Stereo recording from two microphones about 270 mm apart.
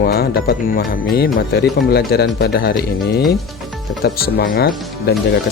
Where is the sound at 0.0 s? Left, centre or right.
Left.